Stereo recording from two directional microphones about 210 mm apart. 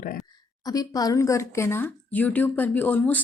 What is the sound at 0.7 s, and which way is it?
Speech, 15° left (ahead or behind).